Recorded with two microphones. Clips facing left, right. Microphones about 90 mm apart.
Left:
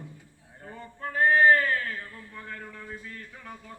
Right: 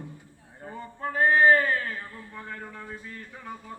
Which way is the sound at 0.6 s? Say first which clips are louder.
Right 4 dB; 15° right (ahead or behind).